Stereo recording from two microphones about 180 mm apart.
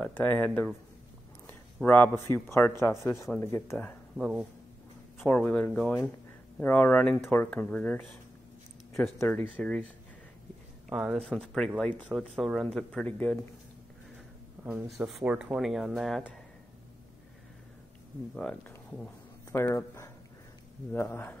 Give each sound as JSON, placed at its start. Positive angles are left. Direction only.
{"t": 0.0, "sound": "speech", "side_deg": 10}
{"t": 5.3, "sound": "speech", "side_deg": 10}
{"t": 9.2, "sound": "speech", "side_deg": 10}
{"t": 10.9, "sound": "speech", "side_deg": -5}
{"t": 14.6, "sound": "speech", "side_deg": -5}
{"t": 18.3, "sound": "speech", "side_deg": 5}